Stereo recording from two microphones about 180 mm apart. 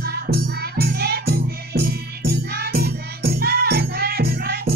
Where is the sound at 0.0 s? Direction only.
60° right (ahead or behind).